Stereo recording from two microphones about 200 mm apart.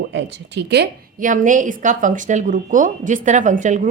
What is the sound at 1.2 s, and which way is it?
Speech, 40° right (ahead or behind).